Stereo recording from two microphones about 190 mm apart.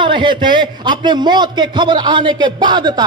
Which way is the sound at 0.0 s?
25° right (ahead or behind).